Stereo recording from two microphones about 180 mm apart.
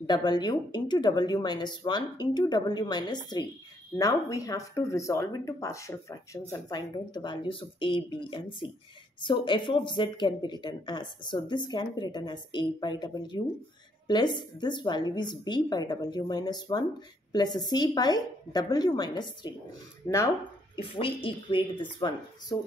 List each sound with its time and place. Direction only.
0.0 s speech: 25° left (ahead or behind)
20.7 s speech: 30° left (ahead or behind)